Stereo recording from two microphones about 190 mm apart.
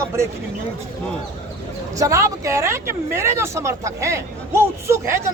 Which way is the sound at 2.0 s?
15° right (ahead or behind).